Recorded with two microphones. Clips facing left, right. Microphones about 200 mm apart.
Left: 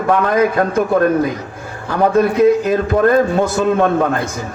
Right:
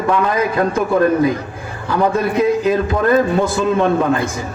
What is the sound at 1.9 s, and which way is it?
A man's voice, 55° left (ahead or behind).